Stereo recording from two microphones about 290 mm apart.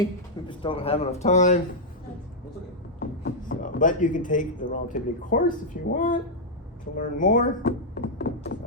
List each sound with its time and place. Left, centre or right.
0.0 s speech: centre
3.0 s speech: left